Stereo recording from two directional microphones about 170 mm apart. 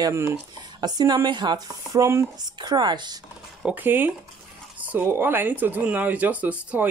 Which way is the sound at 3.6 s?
10° right (ahead or behind).